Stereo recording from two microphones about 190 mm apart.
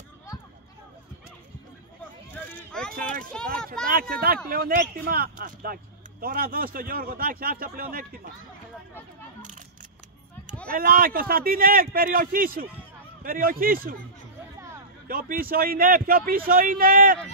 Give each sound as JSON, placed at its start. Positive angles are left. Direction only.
{"t": 2.9, "sound": "a man's voice", "side_deg": -45}
{"t": 10.7, "sound": "a man's voice", "side_deg": -50}
{"t": 15.0, "sound": "a man's voice", "side_deg": -50}